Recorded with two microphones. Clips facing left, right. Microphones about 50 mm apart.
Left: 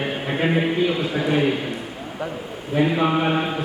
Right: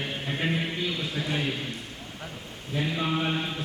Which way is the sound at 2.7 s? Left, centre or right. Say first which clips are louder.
Left 9 dB; left.